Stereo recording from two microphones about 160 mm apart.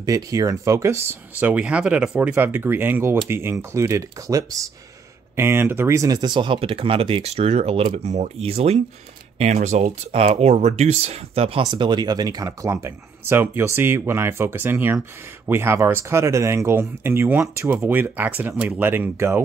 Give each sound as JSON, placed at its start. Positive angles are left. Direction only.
{"t": 0.0, "sound": "speech", "side_deg": -20}